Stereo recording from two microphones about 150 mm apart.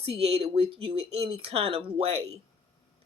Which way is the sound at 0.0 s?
40° right (ahead or behind).